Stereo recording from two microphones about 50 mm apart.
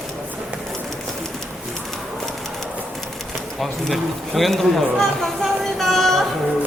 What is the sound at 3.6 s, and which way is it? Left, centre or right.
Speech, centre.